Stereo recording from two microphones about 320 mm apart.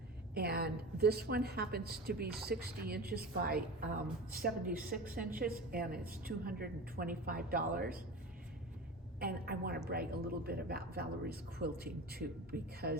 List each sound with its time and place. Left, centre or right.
0.3 s a woman's voice: right
9.2 s a woman's voice: right